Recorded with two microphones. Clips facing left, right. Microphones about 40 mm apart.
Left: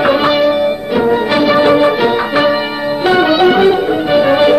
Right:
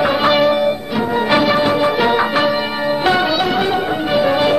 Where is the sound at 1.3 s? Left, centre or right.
Centre.